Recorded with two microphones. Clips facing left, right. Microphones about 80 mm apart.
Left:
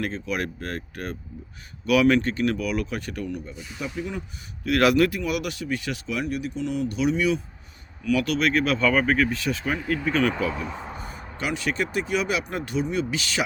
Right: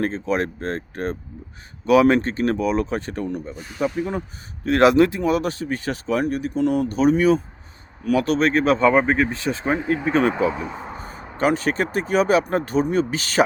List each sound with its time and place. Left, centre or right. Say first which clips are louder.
0.0 s speech: right 6 dB; right
4.6 s speech: right 5 dB; right
10.7 s speech: right 2 dB; centre
10.9 s a sound: right 2 dB; right
11.3 s speech: right 7 dB; right